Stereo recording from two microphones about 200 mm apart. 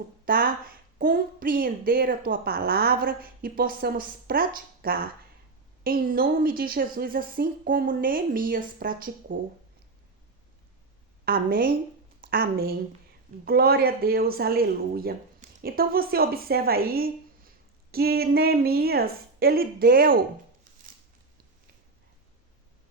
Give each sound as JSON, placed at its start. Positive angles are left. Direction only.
{"t": 0.3, "sound": "a woman's voice", "side_deg": -45}
{"t": 11.3, "sound": "a woman's voice", "side_deg": -50}